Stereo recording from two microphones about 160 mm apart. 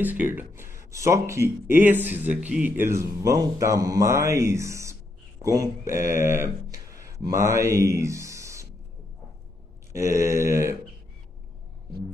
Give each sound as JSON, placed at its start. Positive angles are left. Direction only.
{"t": 0.0, "sound": "speech", "side_deg": -10}
{"t": 9.9, "sound": "speech", "side_deg": -20}